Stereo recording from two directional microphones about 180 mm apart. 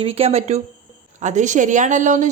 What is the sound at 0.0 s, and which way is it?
A woman's voice, 35° right (ahead or behind).